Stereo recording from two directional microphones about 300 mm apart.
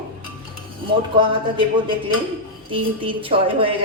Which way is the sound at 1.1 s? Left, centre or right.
Centre.